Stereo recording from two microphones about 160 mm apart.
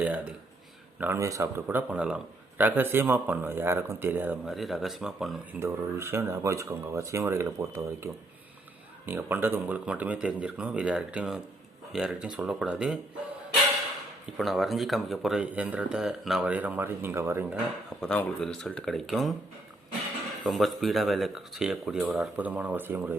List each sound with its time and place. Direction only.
0.0 s speech: 10° right (ahead or behind)
4.4 s speech: centre (ahead or behind)
5.5 s speech: 15° right (ahead or behind)
14.3 s speech: centre (ahead or behind); by 17.6 s 15° right (ahead or behind)
18.0 s speech: 5° left (ahead or behind)
20.4 s speech: centre (ahead or behind)